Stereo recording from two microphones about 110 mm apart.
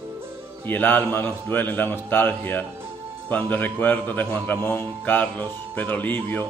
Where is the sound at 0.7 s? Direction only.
15° left (ahead or behind).